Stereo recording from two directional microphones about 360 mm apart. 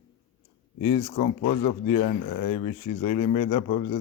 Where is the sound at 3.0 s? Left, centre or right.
Centre.